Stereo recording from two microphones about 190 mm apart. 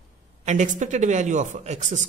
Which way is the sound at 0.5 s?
40° right (ahead or behind).